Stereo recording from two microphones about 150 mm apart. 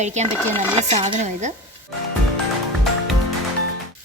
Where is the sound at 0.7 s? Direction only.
45° right (ahead or behind).